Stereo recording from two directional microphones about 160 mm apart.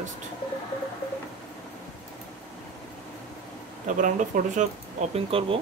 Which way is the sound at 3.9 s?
50° right (ahead or behind).